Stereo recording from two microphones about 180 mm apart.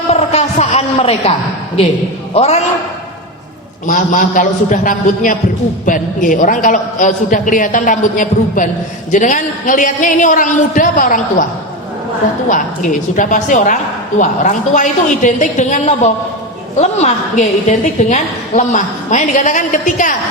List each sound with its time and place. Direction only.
0.1 s a sound: 35° left (ahead or behind)
2.3 s a man's voice: 35° left (ahead or behind)
3.8 s a woman's voice: 45° left (ahead or behind)
12.5 s a woman's voice: 45° left (ahead or behind)